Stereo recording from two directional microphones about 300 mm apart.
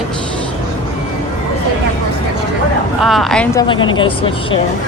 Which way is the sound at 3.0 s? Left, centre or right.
Centre.